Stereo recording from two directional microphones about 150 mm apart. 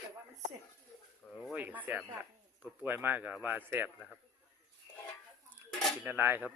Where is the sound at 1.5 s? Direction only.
10° right (ahead or behind).